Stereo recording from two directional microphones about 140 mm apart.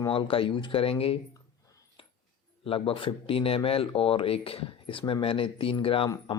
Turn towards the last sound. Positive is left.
turn(degrees=40)  # may be behind; listen again after turning